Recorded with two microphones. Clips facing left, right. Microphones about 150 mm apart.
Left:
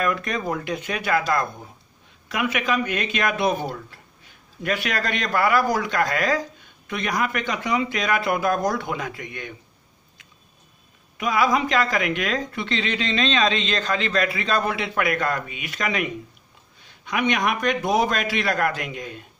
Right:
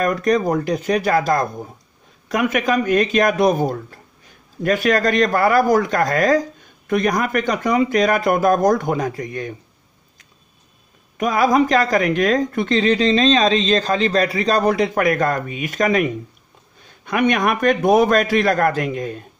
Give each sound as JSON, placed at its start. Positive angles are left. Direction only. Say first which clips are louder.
{"t": 0.0, "sound": "speech", "louder": "right 7 dB", "side_deg": -40}
{"t": 11.1, "sound": "speech", "louder": "right 5 dB", "side_deg": -45}